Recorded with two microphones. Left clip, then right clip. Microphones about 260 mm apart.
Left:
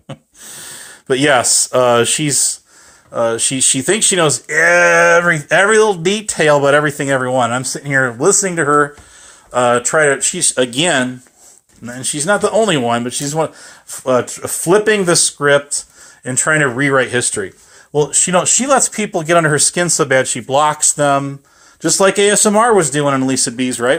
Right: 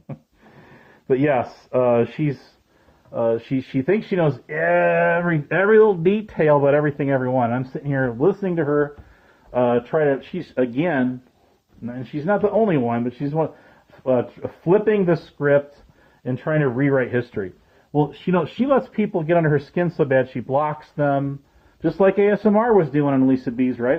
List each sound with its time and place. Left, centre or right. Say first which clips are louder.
1.0 s speech: left 7 dB; centre